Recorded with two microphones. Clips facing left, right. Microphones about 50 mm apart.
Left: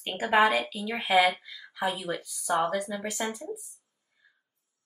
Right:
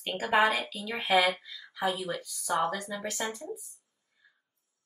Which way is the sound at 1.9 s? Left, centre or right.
Left.